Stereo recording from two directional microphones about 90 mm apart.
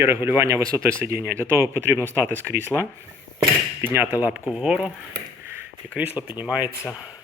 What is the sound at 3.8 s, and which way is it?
Speech, 25° right (ahead or behind).